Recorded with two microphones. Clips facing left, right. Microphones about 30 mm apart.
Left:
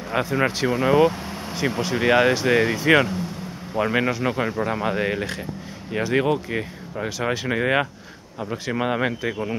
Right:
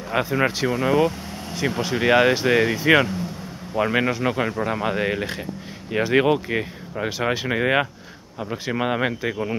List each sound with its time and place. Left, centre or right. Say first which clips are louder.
0.1 s speech: right 1 dB; centre